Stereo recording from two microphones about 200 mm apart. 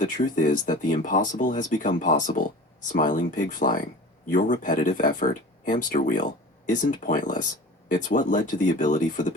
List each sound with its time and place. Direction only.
0.0 s speech: 40° left (ahead or behind)